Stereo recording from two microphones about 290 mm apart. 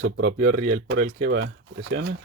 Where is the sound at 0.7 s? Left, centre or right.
Right.